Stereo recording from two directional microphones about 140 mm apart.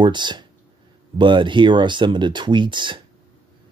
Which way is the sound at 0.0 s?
35° right (ahead or behind).